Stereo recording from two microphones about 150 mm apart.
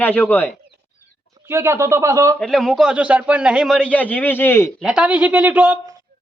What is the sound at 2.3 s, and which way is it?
A man's voice, centre (ahead or behind).